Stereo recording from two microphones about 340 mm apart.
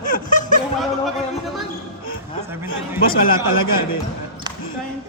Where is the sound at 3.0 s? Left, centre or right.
Left.